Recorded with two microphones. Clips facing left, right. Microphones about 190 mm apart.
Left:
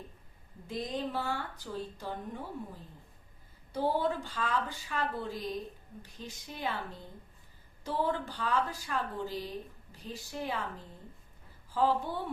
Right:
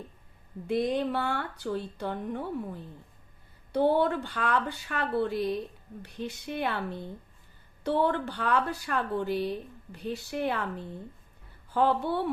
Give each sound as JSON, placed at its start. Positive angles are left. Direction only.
{"t": 0.7, "sound": "speech", "side_deg": -65}
{"t": 3.7, "sound": "speech", "side_deg": -65}